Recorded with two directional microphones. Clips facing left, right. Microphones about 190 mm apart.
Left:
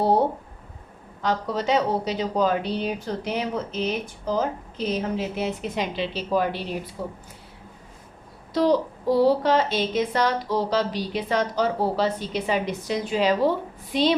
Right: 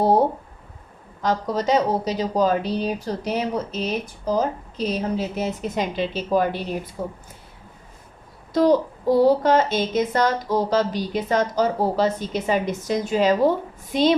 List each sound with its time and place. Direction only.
1.2 s speech: 45° right (ahead or behind)
8.5 s speech: 45° right (ahead or behind)